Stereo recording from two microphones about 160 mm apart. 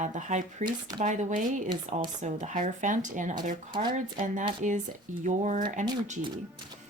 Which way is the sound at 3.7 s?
30° right (ahead or behind).